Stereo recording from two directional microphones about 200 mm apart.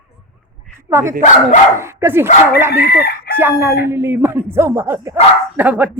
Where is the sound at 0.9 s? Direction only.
15° right (ahead or behind).